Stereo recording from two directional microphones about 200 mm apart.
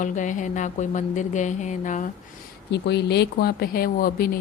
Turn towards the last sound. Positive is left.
turn(degrees=45)  # may be behind; listen again after turning